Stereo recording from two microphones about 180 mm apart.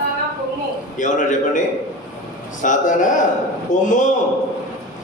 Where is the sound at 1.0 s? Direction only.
45° left (ahead or behind).